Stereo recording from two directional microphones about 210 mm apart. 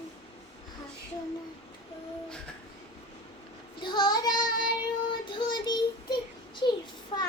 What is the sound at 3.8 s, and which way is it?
Child singing, 20° left (ahead or behind).